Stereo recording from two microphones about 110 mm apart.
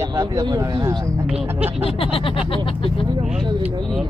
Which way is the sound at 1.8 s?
60° left (ahead or behind).